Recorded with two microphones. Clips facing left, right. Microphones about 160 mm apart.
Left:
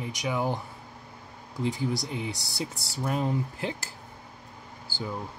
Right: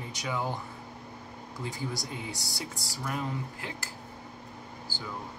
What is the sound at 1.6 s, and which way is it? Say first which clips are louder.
A man's voice: left 7 dB; 20° left (ahead or behind).